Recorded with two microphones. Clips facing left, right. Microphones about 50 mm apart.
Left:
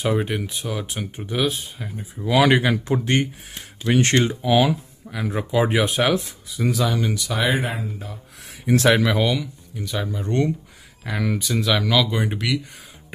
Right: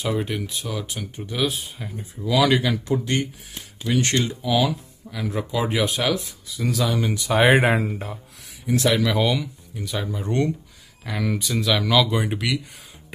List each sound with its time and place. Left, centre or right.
0.0 s speech: centre
1.4 s speech: centre
2.2 s speech: left
5.1 s speech: centre
6.7 s speech: centre
7.5 s speech: right
8.6 s speech: left
9.2 s speech: centre